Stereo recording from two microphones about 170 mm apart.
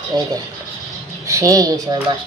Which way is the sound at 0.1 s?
20° right (ahead or behind).